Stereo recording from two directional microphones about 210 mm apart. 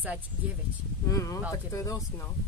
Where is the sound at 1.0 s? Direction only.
15° left (ahead or behind).